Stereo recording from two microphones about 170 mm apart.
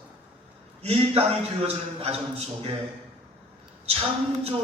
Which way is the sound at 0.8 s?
35° right (ahead or behind).